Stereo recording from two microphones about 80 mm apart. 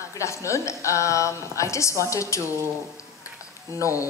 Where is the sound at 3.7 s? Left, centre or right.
Left.